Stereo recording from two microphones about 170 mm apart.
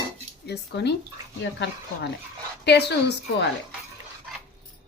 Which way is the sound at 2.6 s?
75° left (ahead or behind).